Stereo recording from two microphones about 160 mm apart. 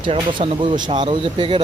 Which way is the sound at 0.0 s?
30° right (ahead or behind).